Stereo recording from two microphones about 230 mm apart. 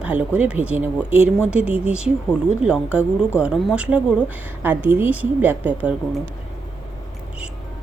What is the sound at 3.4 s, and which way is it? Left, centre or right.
Speech, centre.